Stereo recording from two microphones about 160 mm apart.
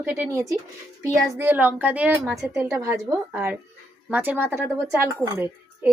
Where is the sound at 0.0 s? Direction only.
15° right (ahead or behind).